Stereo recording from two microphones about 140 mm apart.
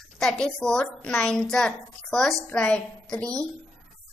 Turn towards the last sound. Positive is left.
turn(degrees=5)  # may be behind; listen again after turning